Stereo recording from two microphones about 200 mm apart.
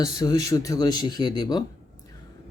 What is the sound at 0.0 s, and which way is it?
Speech, 20° left (ahead or behind).